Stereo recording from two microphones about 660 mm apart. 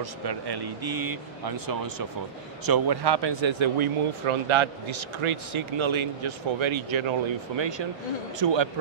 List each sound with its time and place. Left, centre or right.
0.0 s speech: right